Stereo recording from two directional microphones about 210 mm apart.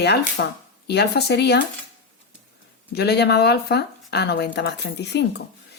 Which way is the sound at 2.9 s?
50° left (ahead or behind).